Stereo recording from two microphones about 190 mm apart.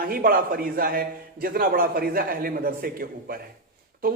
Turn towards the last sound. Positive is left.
turn(degrees=-50)  # may be behind; listen again after turning